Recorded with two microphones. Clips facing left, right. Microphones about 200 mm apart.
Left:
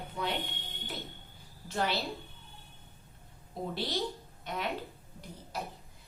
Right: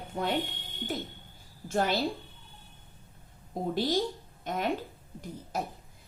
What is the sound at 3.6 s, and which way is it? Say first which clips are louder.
A woman's voice: right 6 dB; 45° right (ahead or behind).